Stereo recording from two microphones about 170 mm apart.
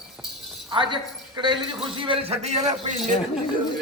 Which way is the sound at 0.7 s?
25° right (ahead or behind).